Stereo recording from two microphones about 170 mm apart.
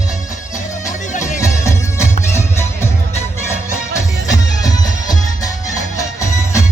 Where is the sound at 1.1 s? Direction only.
45° left (ahead or behind).